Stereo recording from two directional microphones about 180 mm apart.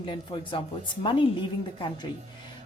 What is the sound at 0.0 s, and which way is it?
Speech, 25° left (ahead or behind).